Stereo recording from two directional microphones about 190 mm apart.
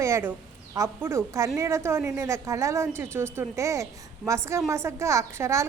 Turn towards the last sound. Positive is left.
turn(degrees=-15)  # may be behind; listen again after turning